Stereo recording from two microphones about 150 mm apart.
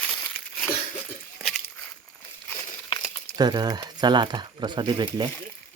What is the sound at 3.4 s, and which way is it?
Speech, 30° right (ahead or behind).